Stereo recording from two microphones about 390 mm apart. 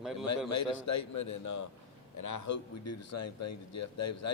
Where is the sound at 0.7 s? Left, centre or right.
Left.